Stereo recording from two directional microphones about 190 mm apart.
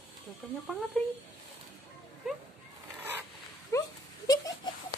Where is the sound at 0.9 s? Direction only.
5° left (ahead or behind).